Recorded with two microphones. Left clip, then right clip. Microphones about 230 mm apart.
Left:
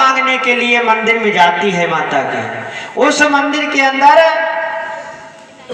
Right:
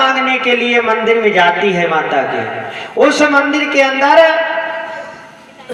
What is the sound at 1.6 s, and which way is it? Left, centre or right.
Speech, left.